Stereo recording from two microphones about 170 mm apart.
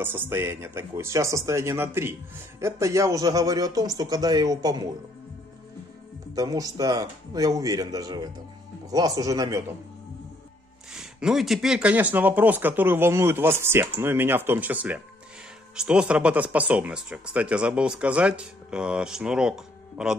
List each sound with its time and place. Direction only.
0.0 s speech: 10° right (ahead or behind)
6.3 s speech: 20° right (ahead or behind)
10.9 s speech: 5° right (ahead or behind)